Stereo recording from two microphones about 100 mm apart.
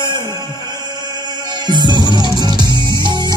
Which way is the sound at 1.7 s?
50° right (ahead or behind).